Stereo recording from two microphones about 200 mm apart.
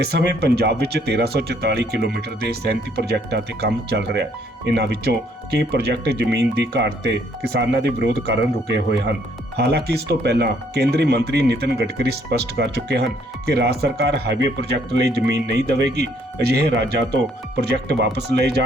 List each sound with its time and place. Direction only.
0.0 s speech: 55° right (ahead or behind)